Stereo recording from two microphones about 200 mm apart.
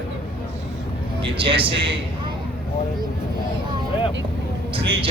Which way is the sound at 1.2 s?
25° right (ahead or behind).